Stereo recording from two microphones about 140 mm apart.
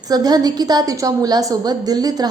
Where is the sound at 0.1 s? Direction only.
30° right (ahead or behind).